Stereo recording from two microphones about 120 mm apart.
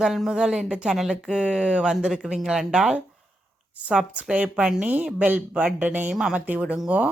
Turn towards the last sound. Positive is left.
turn(degrees=-10)  # may be behind; listen again after turning